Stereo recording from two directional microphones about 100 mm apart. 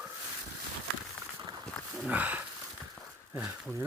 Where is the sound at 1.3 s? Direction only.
45° right (ahead or behind).